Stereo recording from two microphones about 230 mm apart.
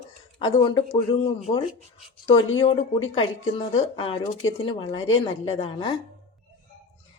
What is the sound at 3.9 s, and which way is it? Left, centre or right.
Speech, left.